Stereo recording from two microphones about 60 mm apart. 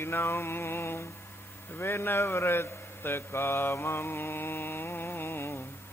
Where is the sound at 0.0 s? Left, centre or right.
Left.